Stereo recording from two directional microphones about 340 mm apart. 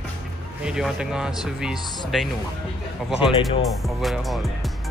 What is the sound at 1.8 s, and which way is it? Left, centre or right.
Speech, centre.